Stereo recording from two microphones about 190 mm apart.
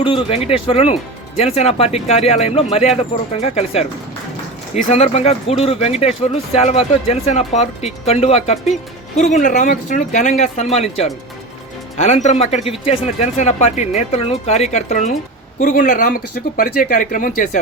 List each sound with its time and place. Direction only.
0.0 s speech: 30° left (ahead or behind)